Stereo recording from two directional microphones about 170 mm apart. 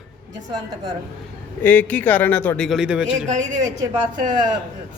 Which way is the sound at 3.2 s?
45° right (ahead or behind).